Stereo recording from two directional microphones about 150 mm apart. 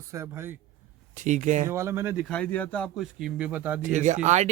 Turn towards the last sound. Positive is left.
turn(degrees=-50)  # may be behind; listen again after turning